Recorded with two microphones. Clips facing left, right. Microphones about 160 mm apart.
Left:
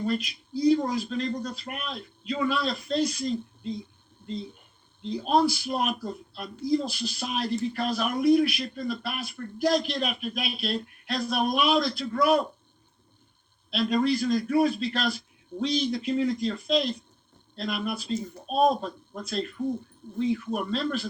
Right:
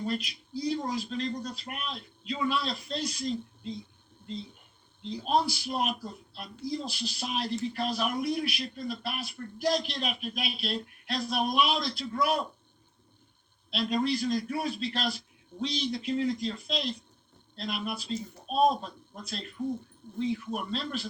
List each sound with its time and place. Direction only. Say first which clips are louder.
0.0 s speech: left 4 dB; 50° left (ahead or behind)
5.0 s speech: left 5 dB; 50° left (ahead or behind)
13.7 s speech: left 4 dB; 50° left (ahead or behind)